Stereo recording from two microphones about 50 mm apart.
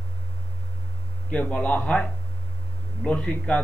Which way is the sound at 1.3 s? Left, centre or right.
Left.